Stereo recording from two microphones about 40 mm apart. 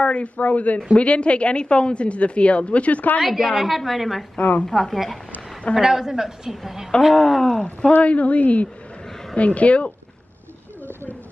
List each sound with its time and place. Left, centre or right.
0.0 s speech: left
3.2 s a woman's voice: centre
4.6 s speech: centre
4.9 s a woman's voice: centre
5.8 s a woman's voice: centre
7.2 s speech: centre
7.5 s speech: left
8.0 s speech: left